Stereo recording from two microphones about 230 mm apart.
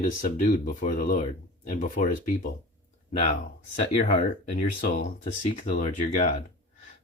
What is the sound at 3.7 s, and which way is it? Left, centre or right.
Speech, left.